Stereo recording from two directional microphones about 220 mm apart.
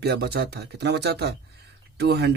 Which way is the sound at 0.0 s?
45° right (ahead or behind).